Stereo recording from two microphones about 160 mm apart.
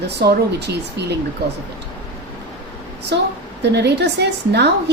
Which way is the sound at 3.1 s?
90° right.